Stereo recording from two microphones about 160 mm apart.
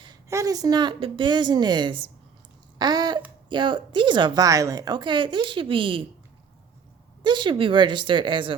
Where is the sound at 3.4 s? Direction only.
30° right (ahead or behind).